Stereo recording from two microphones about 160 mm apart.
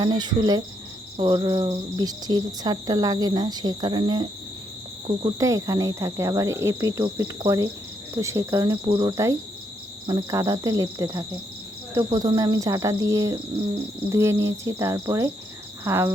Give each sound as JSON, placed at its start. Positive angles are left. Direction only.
{"t": 0.0, "sound": "speech", "side_deg": -25}
{"t": 8.1, "sound": "cricket", "side_deg": -20}
{"t": 8.9, "sound": "speech", "side_deg": -25}
{"t": 15.8, "sound": "cricket", "side_deg": -15}